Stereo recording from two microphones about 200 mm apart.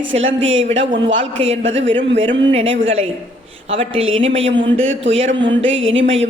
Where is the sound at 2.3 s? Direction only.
25° right (ahead or behind).